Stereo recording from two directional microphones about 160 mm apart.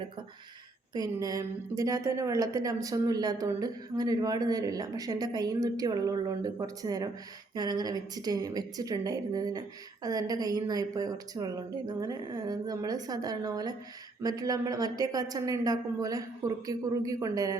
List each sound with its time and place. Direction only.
0.9 s a woman's voice: 25° right (ahead or behind)